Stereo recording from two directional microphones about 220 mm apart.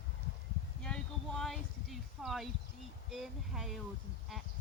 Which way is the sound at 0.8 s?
5° left (ahead or behind).